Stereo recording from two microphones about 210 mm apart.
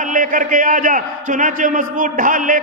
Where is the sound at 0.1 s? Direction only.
40° right (ahead or behind).